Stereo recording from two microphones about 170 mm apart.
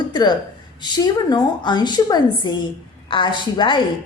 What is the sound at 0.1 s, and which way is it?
A woman's voice, 25° left (ahead or behind).